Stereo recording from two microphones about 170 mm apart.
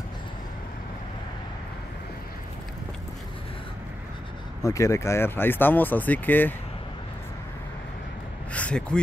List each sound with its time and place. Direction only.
4.6 s speech: 20° left (ahead or behind)
8.5 s speech: 5° left (ahead or behind)